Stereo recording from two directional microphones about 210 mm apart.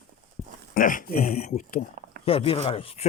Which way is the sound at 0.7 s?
40° left (ahead or behind).